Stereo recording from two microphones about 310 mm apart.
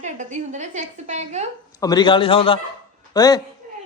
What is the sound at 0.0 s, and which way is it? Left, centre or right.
A woman's voice, right.